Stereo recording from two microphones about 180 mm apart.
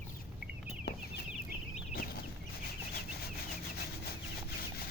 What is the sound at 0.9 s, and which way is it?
Chicken, 60° left (ahead or behind).